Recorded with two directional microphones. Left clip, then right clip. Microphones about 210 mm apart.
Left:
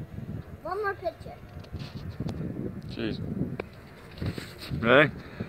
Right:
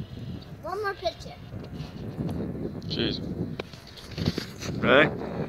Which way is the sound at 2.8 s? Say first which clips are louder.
Right 8 dB; centre (ahead or behind).